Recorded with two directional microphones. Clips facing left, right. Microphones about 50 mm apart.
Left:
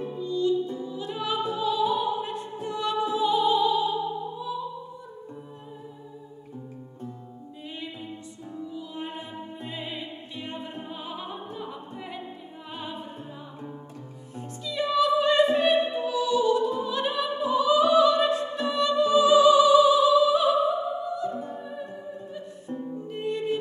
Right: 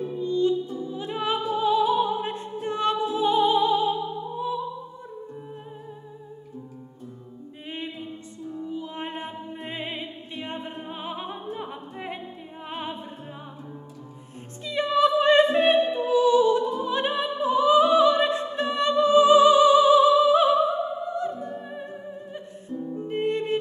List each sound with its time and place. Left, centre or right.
0.2 s music: right
1.5 s opera: right
3.2 s music: right
8.7 s music: right
14.6 s opera: right
23.0 s music: right